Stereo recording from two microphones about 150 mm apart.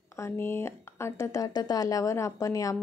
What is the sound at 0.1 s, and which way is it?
Speech, 15° left (ahead or behind).